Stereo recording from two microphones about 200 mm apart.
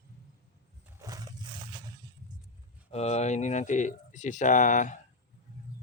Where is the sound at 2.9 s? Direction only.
30° left (ahead or behind).